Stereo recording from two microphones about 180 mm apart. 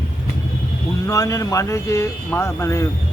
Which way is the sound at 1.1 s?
20° left (ahead or behind).